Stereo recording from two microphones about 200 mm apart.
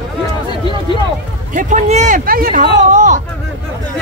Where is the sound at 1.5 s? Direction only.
35° right (ahead or behind).